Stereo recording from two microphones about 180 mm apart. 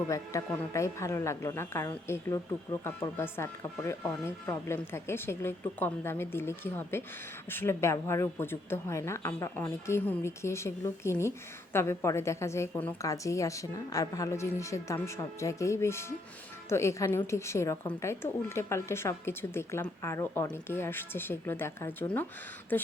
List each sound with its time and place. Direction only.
0.1 s speech: 15° left (ahead or behind)